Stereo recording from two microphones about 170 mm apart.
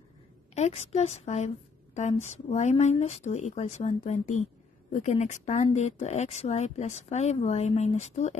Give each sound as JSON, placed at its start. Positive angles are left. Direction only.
{"t": 0.6, "sound": "speech", "side_deg": 40}